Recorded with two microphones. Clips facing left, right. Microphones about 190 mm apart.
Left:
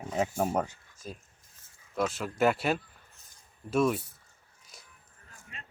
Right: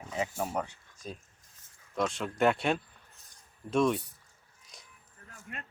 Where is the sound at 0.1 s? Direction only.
50° left (ahead or behind).